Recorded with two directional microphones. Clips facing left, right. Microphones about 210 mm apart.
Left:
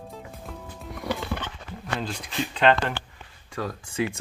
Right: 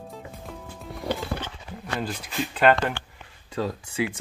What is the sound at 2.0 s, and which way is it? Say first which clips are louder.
Speech: right 1 dB; 5° right (ahead or behind).